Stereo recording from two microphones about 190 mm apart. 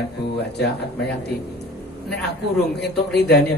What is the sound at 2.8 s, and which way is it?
Speech, 60° left (ahead or behind).